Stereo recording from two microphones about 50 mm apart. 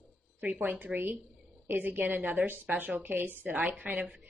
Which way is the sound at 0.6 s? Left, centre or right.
Right.